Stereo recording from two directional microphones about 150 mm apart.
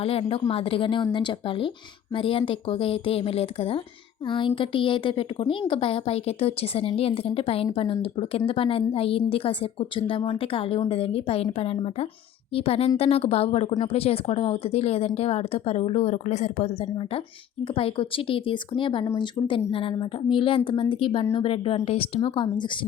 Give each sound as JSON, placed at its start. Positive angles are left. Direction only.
{"t": 0.0, "sound": "a woman's voice", "side_deg": 40}
{"t": 17.7, "sound": "a woman's voice", "side_deg": 35}